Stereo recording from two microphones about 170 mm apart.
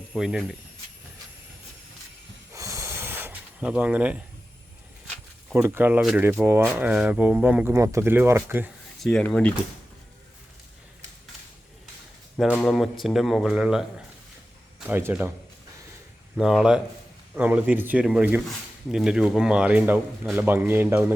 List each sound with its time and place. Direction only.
0.1 s speech: centre (ahead or behind)
2.5 s snort: 20° right (ahead or behind)
5.0 s a sound: 5° left (ahead or behind)
5.5 s speech: 10° right (ahead or behind)
9.0 s speech: 5° left (ahead or behind)
12.4 s speech: centre (ahead or behind)
14.8 s speech: 10° right (ahead or behind)
16.4 s speech: 5° right (ahead or behind)